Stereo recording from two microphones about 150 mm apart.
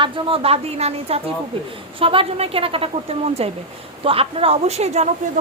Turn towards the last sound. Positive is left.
turn(degrees=-50)  # may be behind; listen again after turning